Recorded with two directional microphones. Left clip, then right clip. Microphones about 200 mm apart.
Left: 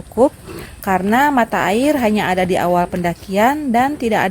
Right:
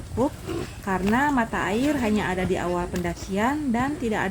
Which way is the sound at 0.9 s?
50° left (ahead or behind).